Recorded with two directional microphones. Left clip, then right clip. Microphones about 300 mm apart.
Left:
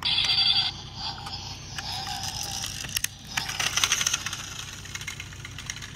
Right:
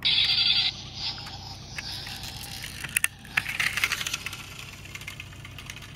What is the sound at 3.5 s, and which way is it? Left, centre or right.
Vehicle, centre.